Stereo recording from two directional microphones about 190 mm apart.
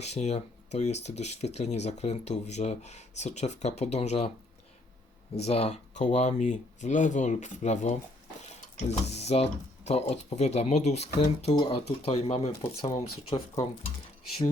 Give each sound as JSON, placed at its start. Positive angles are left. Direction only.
{"t": 0.0, "sound": "speech", "side_deg": 35}
{"t": 5.5, "sound": "speech", "side_deg": 35}
{"t": 11.5, "sound": "speech", "side_deg": 20}
{"t": 11.9, "sound": "speech", "side_deg": 30}